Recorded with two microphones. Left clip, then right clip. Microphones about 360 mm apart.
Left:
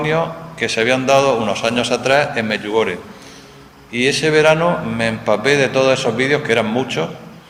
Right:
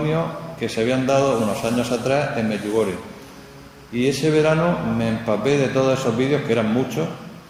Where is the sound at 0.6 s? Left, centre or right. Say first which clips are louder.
Left 6 dB; left.